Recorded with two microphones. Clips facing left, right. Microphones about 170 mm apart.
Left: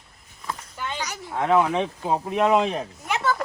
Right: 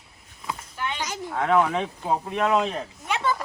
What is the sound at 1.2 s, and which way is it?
Speech, 15° left (ahead or behind).